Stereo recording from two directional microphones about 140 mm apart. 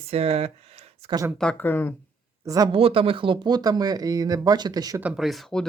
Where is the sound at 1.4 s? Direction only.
10° left (ahead or behind).